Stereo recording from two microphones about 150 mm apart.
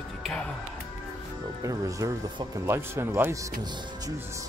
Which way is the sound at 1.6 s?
20° right (ahead or behind).